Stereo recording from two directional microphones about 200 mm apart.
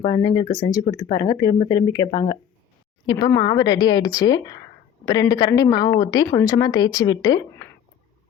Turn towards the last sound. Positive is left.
turn(degrees=20)  # may be behind; listen again after turning